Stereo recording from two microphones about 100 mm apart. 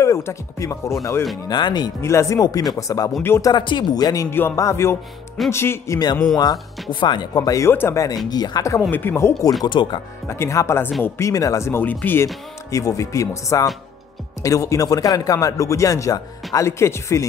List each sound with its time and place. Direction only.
0.0 s speech: 30° left (ahead or behind)
1.5 s speech: 45° left (ahead or behind)
2.0 s speech: 30° left (ahead or behind)
3.2 s speech: 25° left (ahead or behind)
3.4 s speech: 50° left (ahead or behind)
4.3 s speech: 25° left (ahead or behind)
6.3 s speech: 45° left (ahead or behind)
7.7 s speech: 20° left (ahead or behind)
8.3 s speech: 40° left (ahead or behind)
8.9 s speech: 20° left (ahead or behind)
9.7 s speech: 55° left (ahead or behind)
10.2 s speech: 25° left (ahead or behind)
11.8 s speech: 15° left (ahead or behind)
12.7 s speech: 30° left (ahead or behind)